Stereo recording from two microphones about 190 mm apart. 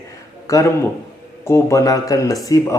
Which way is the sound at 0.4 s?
15° left (ahead or behind).